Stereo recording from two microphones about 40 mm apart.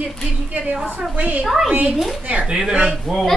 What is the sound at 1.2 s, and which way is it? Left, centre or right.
Speech, right.